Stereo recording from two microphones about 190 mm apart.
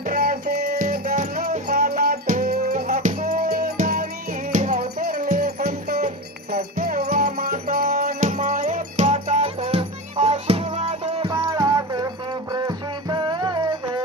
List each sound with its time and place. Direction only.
0.0 s music: 45° right (ahead or behind); by 11.3 s 25° right (ahead or behind)
11.3 s music: 15° right (ahead or behind)